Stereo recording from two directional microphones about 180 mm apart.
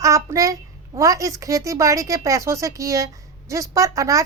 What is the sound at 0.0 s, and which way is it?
Speech, 20° right (ahead or behind).